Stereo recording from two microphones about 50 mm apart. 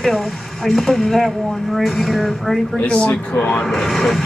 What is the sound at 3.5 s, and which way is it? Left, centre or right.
Speech, centre.